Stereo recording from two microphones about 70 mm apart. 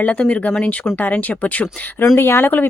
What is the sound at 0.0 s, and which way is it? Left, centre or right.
Speech, left.